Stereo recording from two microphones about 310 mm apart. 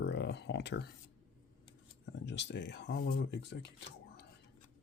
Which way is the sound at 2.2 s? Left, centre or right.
Left.